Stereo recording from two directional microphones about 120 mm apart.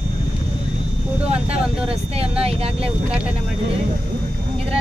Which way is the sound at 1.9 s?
55° right (ahead or behind).